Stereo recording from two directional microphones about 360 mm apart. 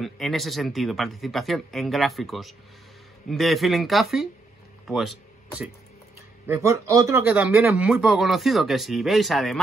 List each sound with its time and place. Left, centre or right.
0.0 s a man's voice: centre
6.4 s a man's voice: centre